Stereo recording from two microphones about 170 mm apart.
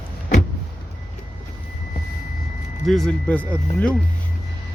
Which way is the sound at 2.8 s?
Centre (ahead or behind).